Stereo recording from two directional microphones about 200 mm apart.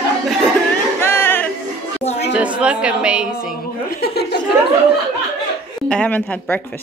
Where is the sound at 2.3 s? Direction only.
5° right (ahead or behind).